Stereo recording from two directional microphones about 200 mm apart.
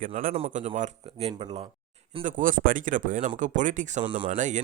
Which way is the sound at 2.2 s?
40° right (ahead or behind).